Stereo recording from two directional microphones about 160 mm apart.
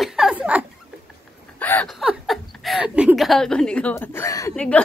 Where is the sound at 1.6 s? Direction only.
10° left (ahead or behind).